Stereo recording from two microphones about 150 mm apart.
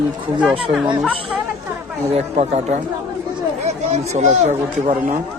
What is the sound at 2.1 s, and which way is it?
Speech, 45° right (ahead or behind).